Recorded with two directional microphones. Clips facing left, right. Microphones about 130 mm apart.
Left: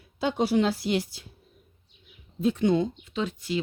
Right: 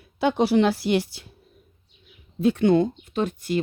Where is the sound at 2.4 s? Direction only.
70° right (ahead or behind); by 3.6 s 50° right (ahead or behind).